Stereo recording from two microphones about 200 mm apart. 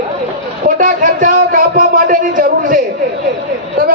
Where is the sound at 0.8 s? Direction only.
45° right (ahead or behind).